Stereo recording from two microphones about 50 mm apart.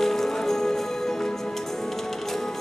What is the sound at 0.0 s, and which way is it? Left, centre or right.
Music, centre.